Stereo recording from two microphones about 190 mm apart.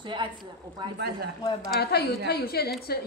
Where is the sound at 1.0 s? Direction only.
60° right (ahead or behind).